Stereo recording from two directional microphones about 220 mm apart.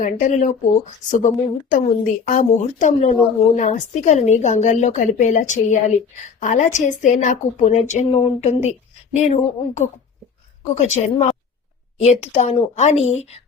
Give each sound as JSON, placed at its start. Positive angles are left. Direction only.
{"t": 0.0, "sound": "a woman's voice", "side_deg": 35}